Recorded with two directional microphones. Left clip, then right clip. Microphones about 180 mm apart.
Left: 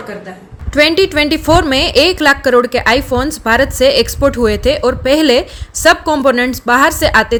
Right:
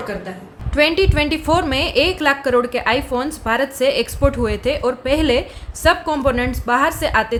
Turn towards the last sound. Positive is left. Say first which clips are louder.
# left 7 dB
turn(degrees=40)  # may be behind; listen again after turning